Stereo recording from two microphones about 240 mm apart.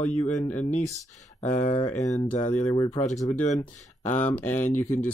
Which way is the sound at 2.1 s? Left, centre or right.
Centre.